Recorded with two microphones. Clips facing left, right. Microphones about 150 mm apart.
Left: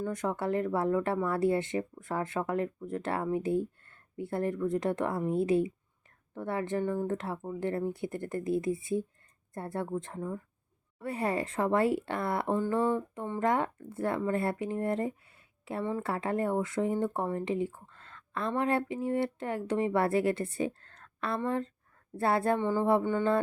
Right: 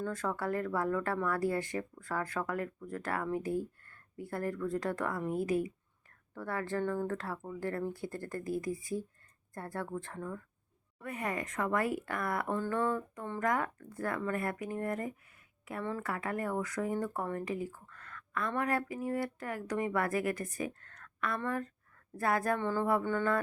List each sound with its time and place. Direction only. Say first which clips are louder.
0.0 s speech: left 3 dB; 20° left (ahead or behind)
11.0 s speech: left 6 dB; 30° left (ahead or behind)
15.8 s speech: left 4 dB; 15° left (ahead or behind)
16.0 s speech: left 5 dB; 30° left (ahead or behind)